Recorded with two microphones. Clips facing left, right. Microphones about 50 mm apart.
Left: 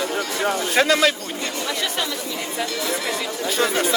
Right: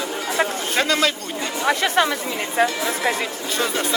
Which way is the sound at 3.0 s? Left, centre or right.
Right.